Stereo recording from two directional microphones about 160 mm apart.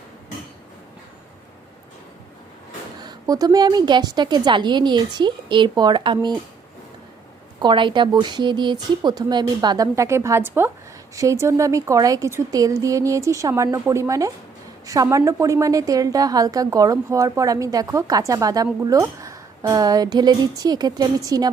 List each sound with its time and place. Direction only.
3.0 s a woman's voice: 25° right (ahead or behind)
7.6 s a woman's voice: 30° right (ahead or behind)